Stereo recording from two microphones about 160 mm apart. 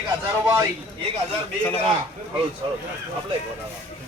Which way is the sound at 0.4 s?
15° right (ahead or behind).